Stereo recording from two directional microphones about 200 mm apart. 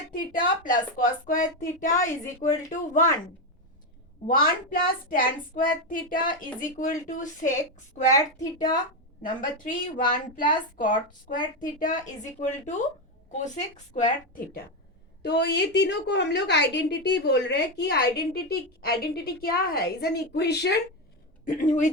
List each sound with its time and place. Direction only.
0.3 s speech: 40° left (ahead or behind)
4.3 s speech: 45° left (ahead or behind)
8.1 s a woman's voice: 15° left (ahead or behind)
10.1 s speech: 45° left (ahead or behind)
15.2 s a woman's voice: 55° left (ahead or behind)
21.4 s speech: 40° left (ahead or behind)